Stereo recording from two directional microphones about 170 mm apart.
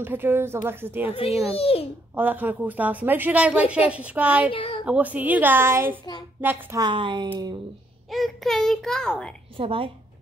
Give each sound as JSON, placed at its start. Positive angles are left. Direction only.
{"t": 0.0, "sound": "a woman's voice", "side_deg": -10}
{"t": 1.1, "sound": "a child's voice", "side_deg": 35}
{"t": 2.1, "sound": "a woman's voice", "side_deg": -10}
{"t": 4.5, "sound": "a child's voice", "side_deg": 30}
{"t": 4.8, "sound": "a woman's voice", "side_deg": -10}
{"t": 6.8, "sound": "a woman's voice", "side_deg": -30}
{"t": 8.1, "sound": "a child's voice", "side_deg": 0}
{"t": 9.6, "sound": "a woman's voice", "side_deg": -30}